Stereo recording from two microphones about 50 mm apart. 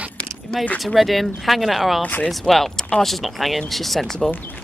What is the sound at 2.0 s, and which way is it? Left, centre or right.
Speech, left.